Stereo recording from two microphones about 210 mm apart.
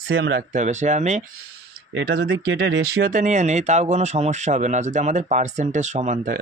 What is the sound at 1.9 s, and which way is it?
Speech, 50° right (ahead or behind).